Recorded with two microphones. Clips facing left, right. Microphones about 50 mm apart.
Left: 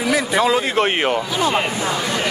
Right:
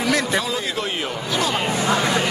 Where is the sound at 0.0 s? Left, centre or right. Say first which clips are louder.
Left 1 dB; centre.